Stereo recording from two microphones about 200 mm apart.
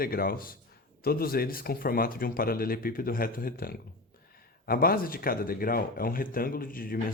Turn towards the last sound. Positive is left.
turn(degrees=45)  # may be behind; listen again after turning